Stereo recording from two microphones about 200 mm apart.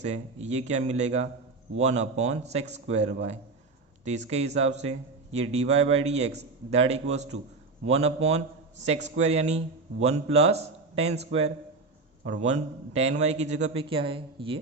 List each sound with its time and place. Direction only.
0.0 s a man's voice: 35° right (ahead or behind)